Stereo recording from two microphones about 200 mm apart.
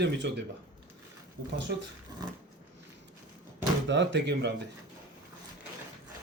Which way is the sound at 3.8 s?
60° right (ahead or behind).